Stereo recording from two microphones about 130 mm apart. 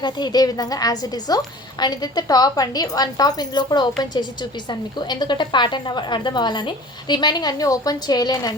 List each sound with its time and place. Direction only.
0.0 s a woman's voice: 35° left (ahead or behind)